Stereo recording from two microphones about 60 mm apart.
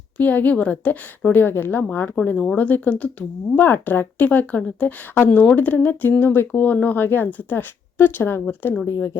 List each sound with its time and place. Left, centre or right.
0.2 s a woman's voice: left
3.6 s a woman's voice: left
8.9 s speech: left